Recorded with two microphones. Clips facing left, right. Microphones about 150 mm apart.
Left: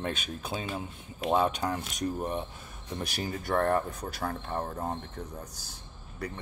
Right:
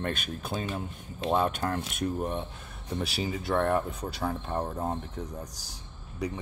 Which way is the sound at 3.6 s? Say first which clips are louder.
Even; 5° right (ahead or behind).